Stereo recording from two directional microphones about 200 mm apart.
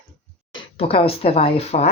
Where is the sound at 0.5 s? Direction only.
30° left (ahead or behind).